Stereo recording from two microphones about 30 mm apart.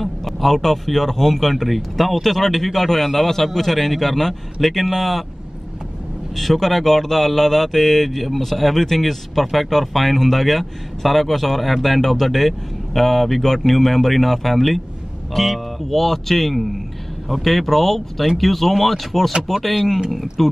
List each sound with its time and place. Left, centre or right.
0.0 s speech: centre
6.3 s speech: centre
12.0 s speech: centre